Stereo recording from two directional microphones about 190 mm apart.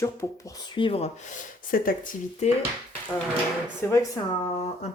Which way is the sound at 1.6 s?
50° left (ahead or behind).